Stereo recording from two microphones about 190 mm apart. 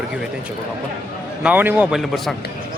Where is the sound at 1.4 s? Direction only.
10° right (ahead or behind).